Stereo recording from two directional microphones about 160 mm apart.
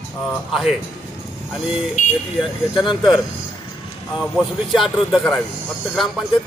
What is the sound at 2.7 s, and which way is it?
Speech, 30° left (ahead or behind).